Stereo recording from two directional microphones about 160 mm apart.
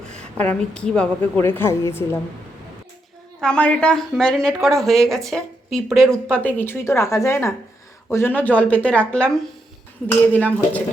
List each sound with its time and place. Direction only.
0.2 s a woman's voice: 5° left (ahead or behind)
3.4 s a woman's voice: 5° left (ahead or behind)